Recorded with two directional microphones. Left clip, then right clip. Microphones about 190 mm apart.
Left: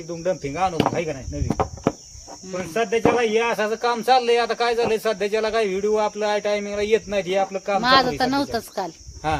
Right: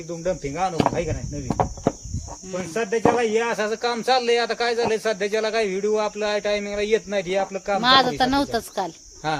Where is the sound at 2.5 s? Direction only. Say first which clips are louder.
Left 2 dB; 10° left (ahead or behind).